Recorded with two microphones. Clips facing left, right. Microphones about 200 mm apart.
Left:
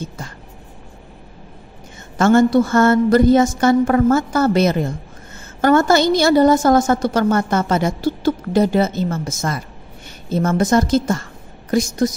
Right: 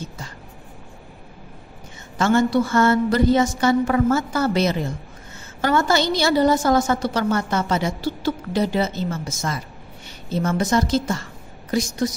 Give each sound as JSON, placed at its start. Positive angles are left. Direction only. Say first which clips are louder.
{"t": 2.1, "sound": "a woman's voice", "louder": "left 5 dB", "side_deg": 50}